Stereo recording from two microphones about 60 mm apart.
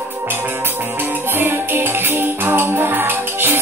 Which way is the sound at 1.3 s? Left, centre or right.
Right.